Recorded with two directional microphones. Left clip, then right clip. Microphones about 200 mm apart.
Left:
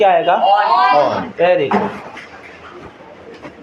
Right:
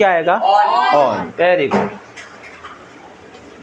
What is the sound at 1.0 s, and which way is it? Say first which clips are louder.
Speech: even; 40° right (ahead or behind).